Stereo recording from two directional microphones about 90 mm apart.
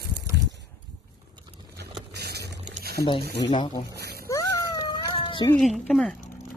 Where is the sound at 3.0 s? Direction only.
65° left (ahead or behind).